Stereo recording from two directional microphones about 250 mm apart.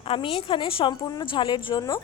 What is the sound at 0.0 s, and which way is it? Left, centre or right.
A woman's voice, left.